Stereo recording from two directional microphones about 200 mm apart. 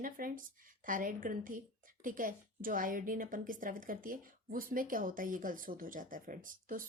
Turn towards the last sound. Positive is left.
turn(degrees=-45)  # may be behind; listen again after turning